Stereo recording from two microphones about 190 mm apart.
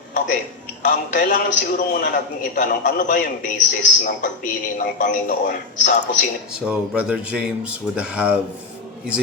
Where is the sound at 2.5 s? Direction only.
45° left (ahead or behind).